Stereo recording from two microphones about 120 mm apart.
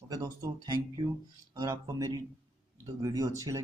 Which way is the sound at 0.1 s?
30° right (ahead or behind).